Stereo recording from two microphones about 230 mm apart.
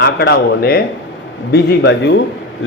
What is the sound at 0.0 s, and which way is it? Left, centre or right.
A man's voice, left.